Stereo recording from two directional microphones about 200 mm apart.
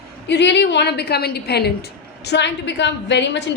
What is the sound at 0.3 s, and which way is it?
A woman's voice, 60° left (ahead or behind).